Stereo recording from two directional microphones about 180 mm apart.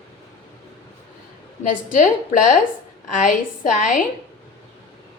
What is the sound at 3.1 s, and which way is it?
Speech, 45° left (ahead or behind).